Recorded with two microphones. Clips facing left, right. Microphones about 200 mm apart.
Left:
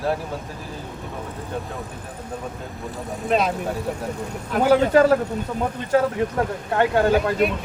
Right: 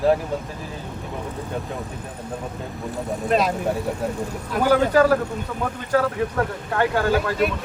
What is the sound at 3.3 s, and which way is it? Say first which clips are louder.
Speech: even; centre (ahead or behind).